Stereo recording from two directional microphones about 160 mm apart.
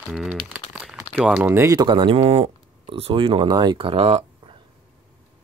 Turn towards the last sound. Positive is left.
turn(degrees=-35)  # may be behind; listen again after turning